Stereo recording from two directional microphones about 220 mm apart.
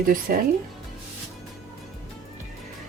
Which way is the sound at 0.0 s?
40° right (ahead or behind).